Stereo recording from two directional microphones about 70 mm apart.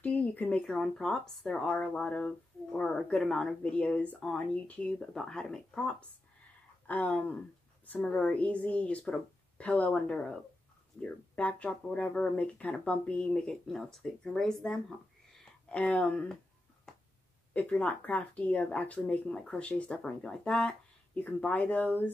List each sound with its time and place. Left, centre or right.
0.0 s a sound: left
0.6 s speech: centre
17.6 s speech: centre